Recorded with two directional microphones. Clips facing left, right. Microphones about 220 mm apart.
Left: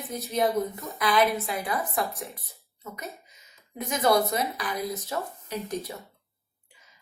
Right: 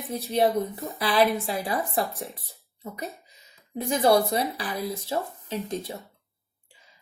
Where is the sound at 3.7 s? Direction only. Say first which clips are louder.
Right 3 dB; 30° right (ahead or behind).